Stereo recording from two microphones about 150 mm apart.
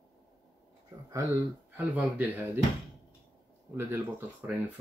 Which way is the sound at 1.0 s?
20° right (ahead or behind).